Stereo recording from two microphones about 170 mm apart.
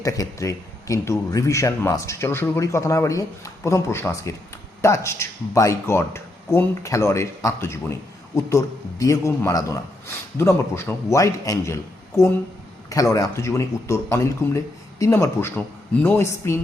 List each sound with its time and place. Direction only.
0.0 s a man's voice: 20° left (ahead or behind)